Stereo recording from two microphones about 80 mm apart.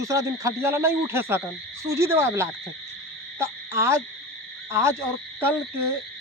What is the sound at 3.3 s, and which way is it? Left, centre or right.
Owl, right.